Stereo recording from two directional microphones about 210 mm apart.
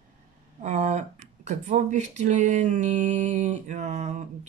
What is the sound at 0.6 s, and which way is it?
Speech, 35° right (ahead or behind).